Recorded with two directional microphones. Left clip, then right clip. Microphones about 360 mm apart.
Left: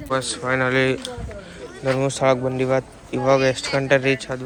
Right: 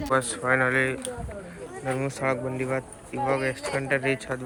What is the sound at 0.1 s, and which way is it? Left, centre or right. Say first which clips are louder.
Speech: left 2 dB; centre.